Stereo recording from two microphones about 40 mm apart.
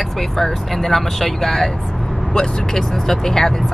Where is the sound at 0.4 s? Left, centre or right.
Centre.